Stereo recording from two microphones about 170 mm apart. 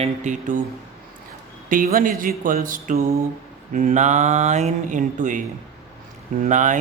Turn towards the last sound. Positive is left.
turn(degrees=-45)  # may be behind; listen again after turning